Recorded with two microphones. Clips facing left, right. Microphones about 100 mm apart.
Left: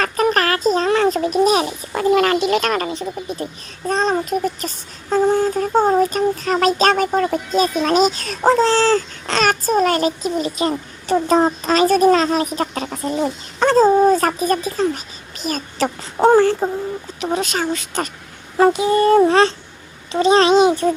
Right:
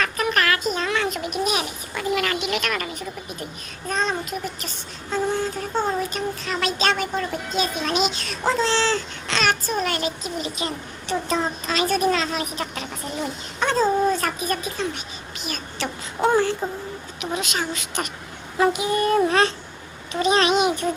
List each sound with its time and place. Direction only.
0.0 s speech: 35° left (ahead or behind)